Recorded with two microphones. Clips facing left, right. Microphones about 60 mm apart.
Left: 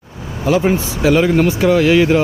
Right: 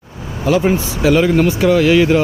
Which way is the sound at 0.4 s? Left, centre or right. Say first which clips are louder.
Even; centre.